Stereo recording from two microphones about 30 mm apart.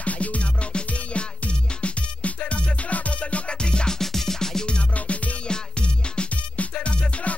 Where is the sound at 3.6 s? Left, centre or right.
Left.